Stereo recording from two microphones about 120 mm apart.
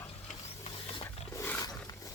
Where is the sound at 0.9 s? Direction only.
50° left (ahead or behind).